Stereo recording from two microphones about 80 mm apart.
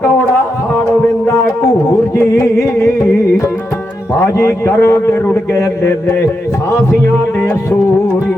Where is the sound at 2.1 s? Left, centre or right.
Left.